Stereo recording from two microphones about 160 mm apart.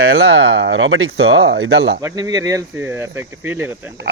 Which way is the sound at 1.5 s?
90° right.